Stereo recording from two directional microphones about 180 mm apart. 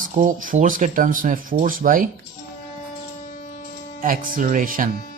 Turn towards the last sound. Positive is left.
turn(degrees=-50)  # may be behind; listen again after turning